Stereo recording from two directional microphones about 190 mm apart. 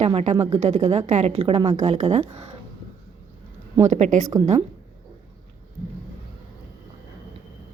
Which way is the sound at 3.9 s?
40° right (ahead or behind).